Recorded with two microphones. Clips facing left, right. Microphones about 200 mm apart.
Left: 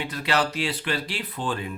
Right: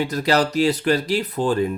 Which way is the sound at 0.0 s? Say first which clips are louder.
Right 6 dB; 40° right (ahead or behind).